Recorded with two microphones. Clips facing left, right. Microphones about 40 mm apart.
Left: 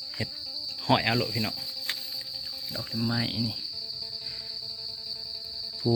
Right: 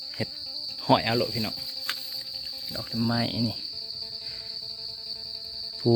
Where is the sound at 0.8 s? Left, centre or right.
Left.